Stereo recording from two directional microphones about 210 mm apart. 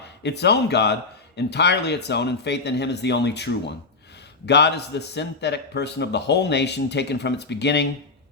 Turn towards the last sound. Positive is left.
turn(degrees=55)  # may be behind; listen again after turning